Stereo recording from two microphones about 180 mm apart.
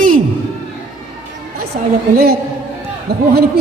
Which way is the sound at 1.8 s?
50° right (ahead or behind).